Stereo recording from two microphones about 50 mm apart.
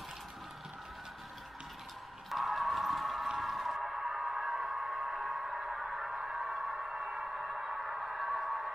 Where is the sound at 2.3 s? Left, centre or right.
Centre.